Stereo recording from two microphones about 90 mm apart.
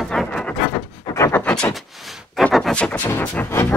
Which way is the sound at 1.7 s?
Centre (ahead or behind).